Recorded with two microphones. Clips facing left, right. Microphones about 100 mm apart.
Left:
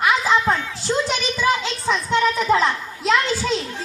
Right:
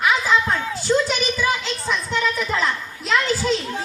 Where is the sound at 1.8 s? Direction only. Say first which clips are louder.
Left 4 dB; 25° left (ahead or behind).